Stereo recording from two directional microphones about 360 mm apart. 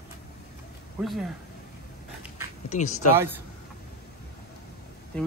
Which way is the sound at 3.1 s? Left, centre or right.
Centre.